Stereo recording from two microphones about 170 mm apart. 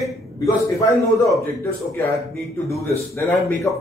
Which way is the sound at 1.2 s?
15° left (ahead or behind).